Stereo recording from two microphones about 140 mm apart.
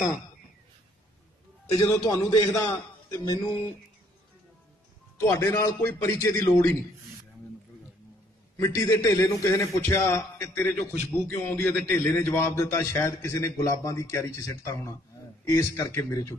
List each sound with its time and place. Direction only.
1.8 s a man's voice: 25° left (ahead or behind)
5.1 s a man's voice: 20° left (ahead or behind)
8.5 s a man's voice: 20° left (ahead or behind)